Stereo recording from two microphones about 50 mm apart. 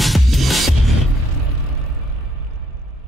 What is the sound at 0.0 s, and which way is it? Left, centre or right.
Music, centre.